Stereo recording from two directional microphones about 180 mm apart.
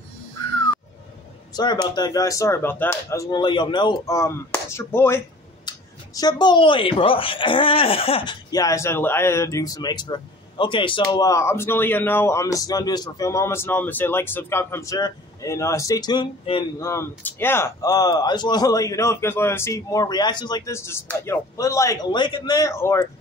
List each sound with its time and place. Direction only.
1.5 s speech: 25° left (ahead or behind)
16.8 s speech: 15° left (ahead or behind)